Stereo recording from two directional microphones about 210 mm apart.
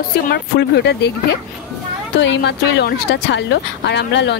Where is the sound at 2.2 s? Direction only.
55° left (ahead or behind).